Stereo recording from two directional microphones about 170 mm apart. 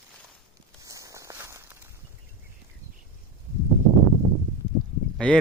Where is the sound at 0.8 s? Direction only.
20° right (ahead or behind).